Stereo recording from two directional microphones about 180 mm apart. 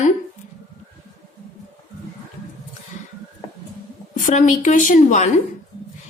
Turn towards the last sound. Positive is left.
turn(degrees=45)  # may be behind; listen again after turning